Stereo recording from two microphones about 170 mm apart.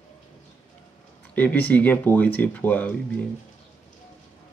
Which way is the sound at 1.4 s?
10° left (ahead or behind).